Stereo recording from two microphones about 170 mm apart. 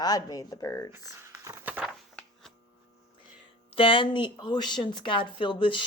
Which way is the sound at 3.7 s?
30° left (ahead or behind).